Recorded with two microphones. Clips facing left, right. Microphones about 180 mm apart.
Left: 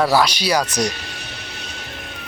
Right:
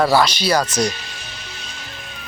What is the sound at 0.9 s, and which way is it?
Music, 65° left (ahead or behind).